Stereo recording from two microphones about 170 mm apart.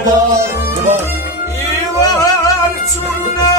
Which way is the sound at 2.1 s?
20° left (ahead or behind).